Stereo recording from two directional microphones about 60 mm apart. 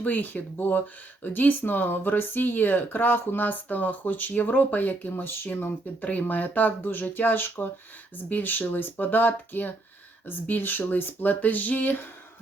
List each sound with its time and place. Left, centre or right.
0.0 s speech: left
5.6 s speech: left